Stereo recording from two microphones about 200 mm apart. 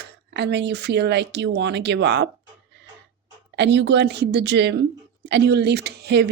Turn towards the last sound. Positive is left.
turn(degrees=-55)  # may be behind; listen again after turning